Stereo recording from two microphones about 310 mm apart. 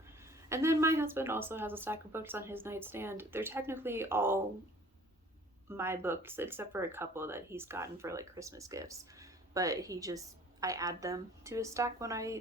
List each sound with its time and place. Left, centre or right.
0.2 s speech: centre
5.6 s speech: centre